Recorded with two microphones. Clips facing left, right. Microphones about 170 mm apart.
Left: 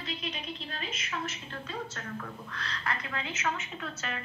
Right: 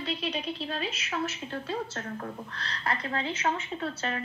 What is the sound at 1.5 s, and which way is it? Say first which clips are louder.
A woman's voice: right 6 dB; 35° right (ahead or behind).